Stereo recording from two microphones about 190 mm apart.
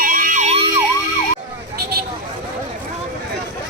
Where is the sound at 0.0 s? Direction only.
45° right (ahead or behind).